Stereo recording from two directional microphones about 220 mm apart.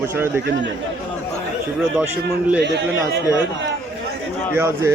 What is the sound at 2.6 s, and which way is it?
Speech, 50° right (ahead or behind).